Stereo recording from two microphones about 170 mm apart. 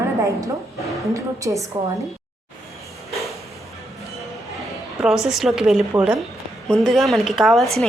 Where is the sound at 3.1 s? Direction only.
Centre (ahead or behind).